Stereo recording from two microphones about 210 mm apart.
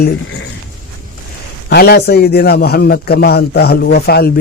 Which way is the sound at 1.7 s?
50° left (ahead or behind).